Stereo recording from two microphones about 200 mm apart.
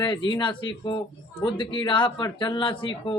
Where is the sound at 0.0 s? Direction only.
25° left (ahead or behind).